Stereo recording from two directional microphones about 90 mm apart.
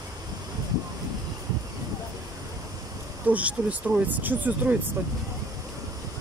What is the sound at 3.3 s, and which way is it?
Speech, 15° right (ahead or behind).